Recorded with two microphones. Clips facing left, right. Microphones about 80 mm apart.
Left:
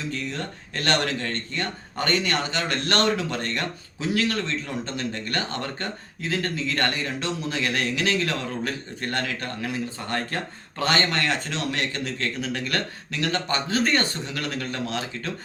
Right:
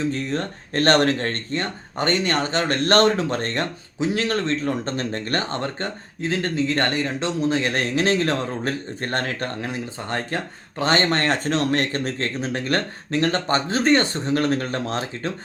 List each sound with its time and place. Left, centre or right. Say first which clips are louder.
0.0 s speech: right 6 dB; right